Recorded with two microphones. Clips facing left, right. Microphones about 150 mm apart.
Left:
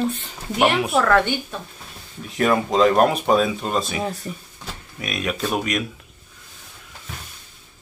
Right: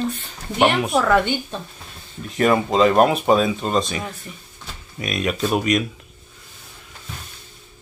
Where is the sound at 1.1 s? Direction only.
15° right (ahead or behind).